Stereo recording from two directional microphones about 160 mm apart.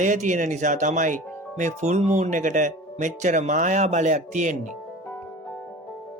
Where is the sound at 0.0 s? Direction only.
50° right (ahead or behind).